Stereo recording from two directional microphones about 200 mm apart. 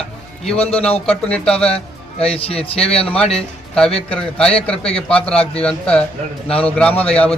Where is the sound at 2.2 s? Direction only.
30° left (ahead or behind).